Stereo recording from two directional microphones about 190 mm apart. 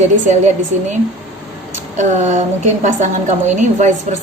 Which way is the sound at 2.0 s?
40° right (ahead or behind).